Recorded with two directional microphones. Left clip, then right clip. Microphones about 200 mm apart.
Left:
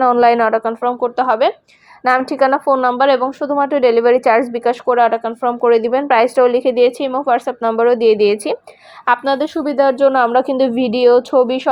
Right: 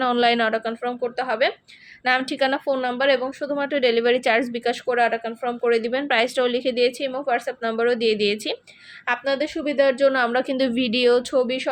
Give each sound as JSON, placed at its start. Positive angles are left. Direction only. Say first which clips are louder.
{"t": 0.4, "sound": "speech", "louder": "left 8 dB", "side_deg": 5}
{"t": 2.3, "sound": "a woman's voice", "louder": "left 9 dB", "side_deg": -5}
{"t": 4.2, "sound": "a woman's voice", "louder": "left 7 dB", "side_deg": -15}
{"t": 4.4, "sound": "a woman's voice", "louder": "left 8 dB", "side_deg": 5}